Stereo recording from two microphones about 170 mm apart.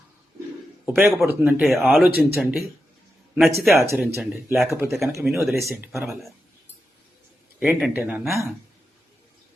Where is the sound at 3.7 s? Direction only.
15° right (ahead or behind).